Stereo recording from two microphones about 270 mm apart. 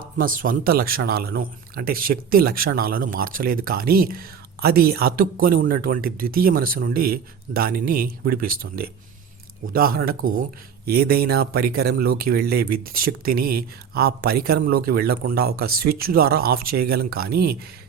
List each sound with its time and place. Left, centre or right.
0.0 s speech: right